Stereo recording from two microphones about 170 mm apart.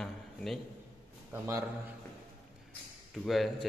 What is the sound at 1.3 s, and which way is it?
Speech, 15° right (ahead or behind).